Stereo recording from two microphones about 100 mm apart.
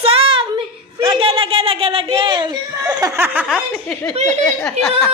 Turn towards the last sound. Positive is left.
turn(degrees=5)  # may be behind; listen again after turning